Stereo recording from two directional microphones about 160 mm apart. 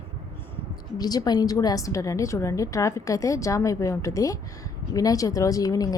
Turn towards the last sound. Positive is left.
turn(degrees=20)  # may be behind; listen again after turning